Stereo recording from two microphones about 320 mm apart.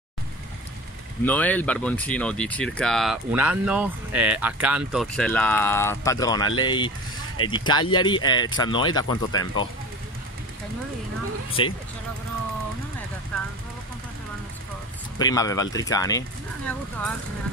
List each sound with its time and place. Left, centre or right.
1.2 s speech: centre
11.6 s speech: centre
13.3 s vehicle: centre
15.1 s speech: centre